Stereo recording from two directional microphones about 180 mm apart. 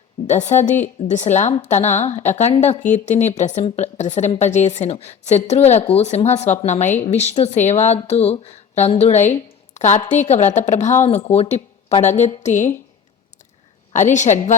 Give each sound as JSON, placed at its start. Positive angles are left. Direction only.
{"t": 0.3, "sound": "a woman's voice", "side_deg": 40}
{"t": 13.9, "sound": "a woman's voice", "side_deg": 45}